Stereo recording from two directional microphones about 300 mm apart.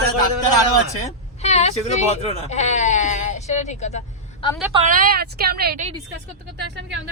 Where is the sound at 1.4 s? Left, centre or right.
Left.